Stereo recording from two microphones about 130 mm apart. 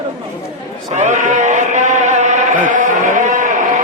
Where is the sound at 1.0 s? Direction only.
70° right (ahead or behind).